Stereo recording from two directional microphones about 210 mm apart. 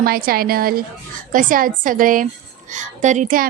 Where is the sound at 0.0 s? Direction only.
45° right (ahead or behind).